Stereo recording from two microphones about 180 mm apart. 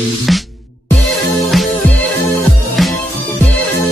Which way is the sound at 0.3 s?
Centre (ahead or behind).